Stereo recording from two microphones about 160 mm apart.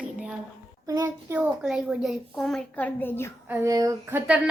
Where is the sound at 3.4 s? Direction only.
20° right (ahead or behind).